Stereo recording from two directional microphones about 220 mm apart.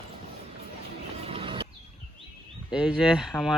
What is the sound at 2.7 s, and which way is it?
Speech, 5° right (ahead or behind).